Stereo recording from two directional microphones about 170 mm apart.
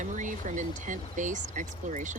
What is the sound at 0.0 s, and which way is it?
Speech, 50° right (ahead or behind).